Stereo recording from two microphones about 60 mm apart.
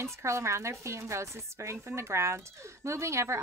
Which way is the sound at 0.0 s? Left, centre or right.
Right.